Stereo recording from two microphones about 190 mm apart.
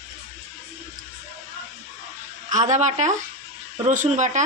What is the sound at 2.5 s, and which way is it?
A woman's voice, 40° right (ahead or behind).